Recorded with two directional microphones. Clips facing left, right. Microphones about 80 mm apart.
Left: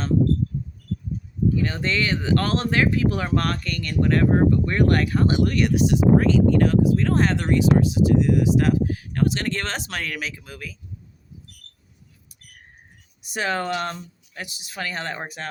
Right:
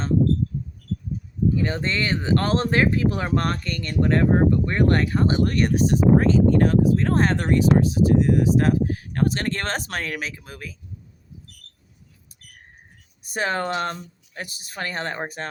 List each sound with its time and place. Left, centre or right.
1.6 s speech: right
13.3 s speech: right